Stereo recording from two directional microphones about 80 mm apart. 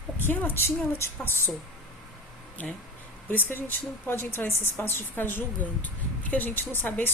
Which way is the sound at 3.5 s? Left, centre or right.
Left.